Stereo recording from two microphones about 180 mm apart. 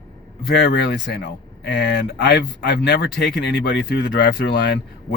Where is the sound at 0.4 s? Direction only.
65° left (ahead or behind).